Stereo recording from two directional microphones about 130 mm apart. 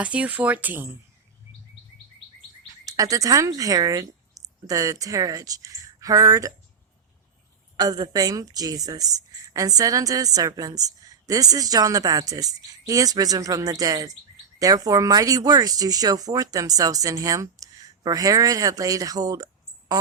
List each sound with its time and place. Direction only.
0.0 s speech: 10° right (ahead or behind)
2.8 s speech: 25° right (ahead or behind)
7.8 s speech: 30° right (ahead or behind)